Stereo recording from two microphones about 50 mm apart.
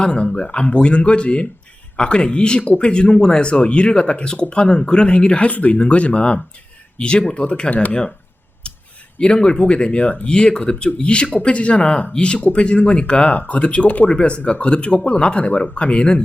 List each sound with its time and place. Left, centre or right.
0.0 s speech: centre
7.7 s speech: left
8.7 s a sound: left
9.1 s speech: centre